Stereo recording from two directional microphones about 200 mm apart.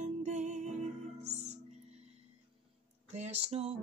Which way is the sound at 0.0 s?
35° right (ahead or behind).